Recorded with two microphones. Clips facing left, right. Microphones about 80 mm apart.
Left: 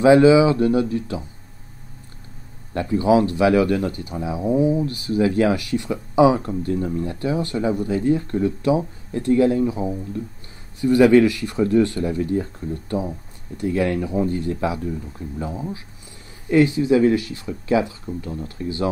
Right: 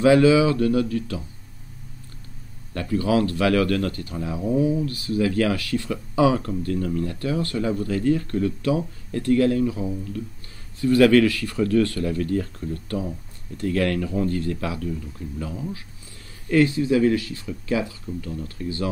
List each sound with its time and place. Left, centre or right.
0.0 s speech: left
2.7 s speech: left